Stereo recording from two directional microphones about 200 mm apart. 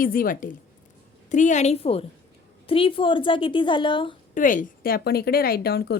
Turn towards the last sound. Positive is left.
turn(degrees=50)  # may be behind; listen again after turning